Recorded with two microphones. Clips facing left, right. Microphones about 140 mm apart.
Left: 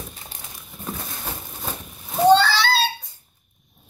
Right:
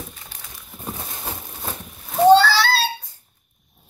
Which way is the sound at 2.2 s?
5° right (ahead or behind).